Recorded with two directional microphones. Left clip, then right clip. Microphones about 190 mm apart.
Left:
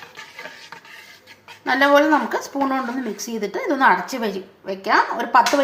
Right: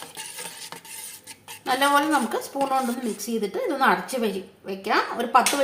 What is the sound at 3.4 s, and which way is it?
A woman's voice, 15° left (ahead or behind).